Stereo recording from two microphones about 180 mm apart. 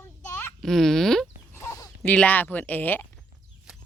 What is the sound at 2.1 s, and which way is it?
Speech, 10° left (ahead or behind).